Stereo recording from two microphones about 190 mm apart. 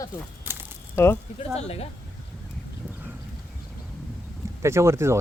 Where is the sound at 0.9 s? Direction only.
15° left (ahead or behind).